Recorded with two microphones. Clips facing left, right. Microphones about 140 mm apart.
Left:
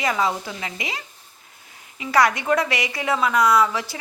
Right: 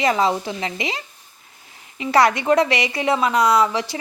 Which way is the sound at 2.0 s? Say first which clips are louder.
Right 3 dB; 25° right (ahead or behind).